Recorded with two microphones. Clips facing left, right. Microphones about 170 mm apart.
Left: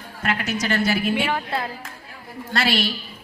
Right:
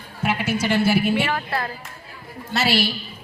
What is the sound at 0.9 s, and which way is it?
Speech, 25° right (ahead or behind).